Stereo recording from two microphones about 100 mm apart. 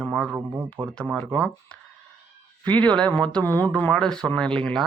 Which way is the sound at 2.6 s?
15° left (ahead or behind).